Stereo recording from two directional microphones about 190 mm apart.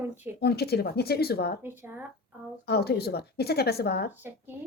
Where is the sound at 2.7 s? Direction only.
55° left (ahead or behind).